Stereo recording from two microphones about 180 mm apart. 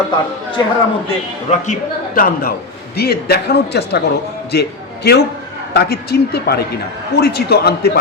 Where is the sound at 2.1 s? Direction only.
55° left (ahead or behind).